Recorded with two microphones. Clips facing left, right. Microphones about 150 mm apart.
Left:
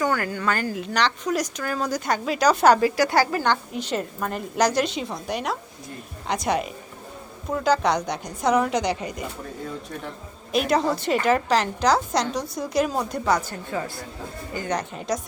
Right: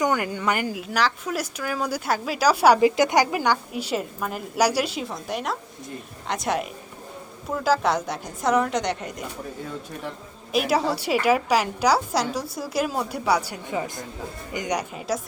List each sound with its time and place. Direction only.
0.0 s a woman's voice: 20° right (ahead or behind)
0.8 s speech: 5° right (ahead or behind)
2.8 s a woman's voice: 20° right (ahead or behind); by 9.2 s centre (ahead or behind)
10.5 s a woman's voice: 5° right (ahead or behind)